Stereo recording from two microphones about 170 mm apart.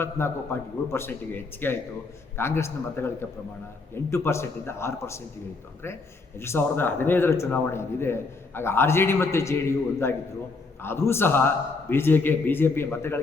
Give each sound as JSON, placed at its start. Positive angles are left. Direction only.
{"t": 0.0, "sound": "a man's voice", "side_deg": 15}
{"t": 6.4, "sound": "a man's voice", "side_deg": 15}